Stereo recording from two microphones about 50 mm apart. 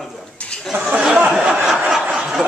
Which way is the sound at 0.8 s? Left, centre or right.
Right.